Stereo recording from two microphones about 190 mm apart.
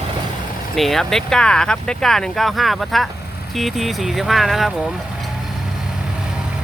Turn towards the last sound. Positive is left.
turn(degrees=0)  # may be behind; listen again after turning